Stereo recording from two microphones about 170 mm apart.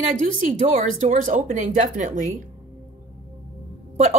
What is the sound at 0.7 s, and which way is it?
Speech, 50° right (ahead or behind).